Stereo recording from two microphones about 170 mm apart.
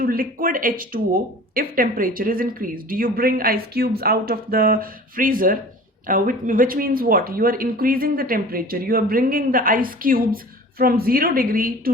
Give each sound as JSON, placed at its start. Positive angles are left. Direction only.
{"t": 0.0, "sound": "speech", "side_deg": -55}